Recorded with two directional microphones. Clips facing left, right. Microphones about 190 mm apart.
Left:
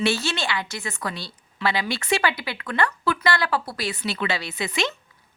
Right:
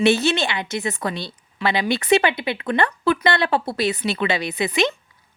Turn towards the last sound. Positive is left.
turn(degrees=-20)  # may be behind; listen again after turning